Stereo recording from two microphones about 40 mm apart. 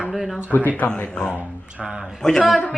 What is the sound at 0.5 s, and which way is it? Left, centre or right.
Speech, left.